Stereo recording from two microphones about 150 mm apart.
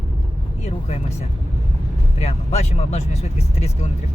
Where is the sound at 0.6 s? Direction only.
45° left (ahead or behind).